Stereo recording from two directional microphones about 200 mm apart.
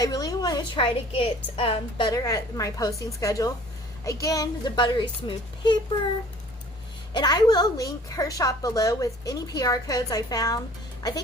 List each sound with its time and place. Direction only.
0.0 s a sound: 20° left (ahead or behind)
1.5 s a woman's voice: 25° left (ahead or behind)
7.1 s a woman's voice: 20° left (ahead or behind)